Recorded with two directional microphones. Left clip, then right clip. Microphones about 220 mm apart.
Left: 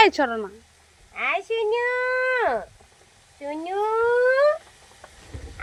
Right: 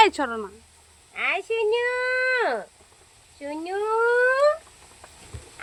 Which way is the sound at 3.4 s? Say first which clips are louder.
Left 2 dB; 20° right (ahead or behind).